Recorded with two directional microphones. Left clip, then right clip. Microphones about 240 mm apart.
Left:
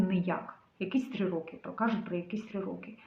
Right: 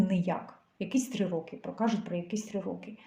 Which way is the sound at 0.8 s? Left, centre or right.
Right.